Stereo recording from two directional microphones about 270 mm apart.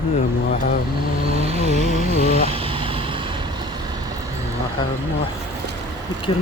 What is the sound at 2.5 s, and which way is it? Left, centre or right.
Vehicle, centre.